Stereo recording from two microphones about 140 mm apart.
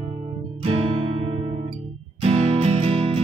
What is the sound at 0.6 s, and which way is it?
Music, 40° right (ahead or behind).